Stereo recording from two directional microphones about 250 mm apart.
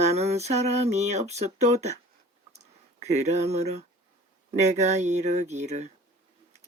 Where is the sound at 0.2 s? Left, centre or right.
Right.